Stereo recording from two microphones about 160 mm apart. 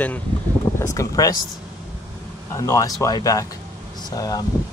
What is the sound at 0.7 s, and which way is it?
Speech, 20° left (ahead or behind).